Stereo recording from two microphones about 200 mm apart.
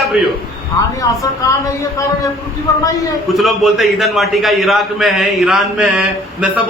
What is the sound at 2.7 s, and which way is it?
Speech, 15° left (ahead or behind).